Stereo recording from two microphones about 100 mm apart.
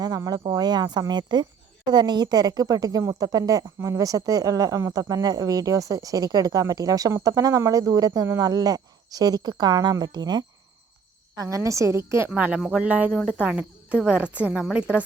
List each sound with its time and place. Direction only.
0.3 s a woman's voice: 40° right (ahead or behind)
11.3 s a woman's voice: 30° right (ahead or behind)
12.3 s a woman's voice: 10° right (ahead or behind)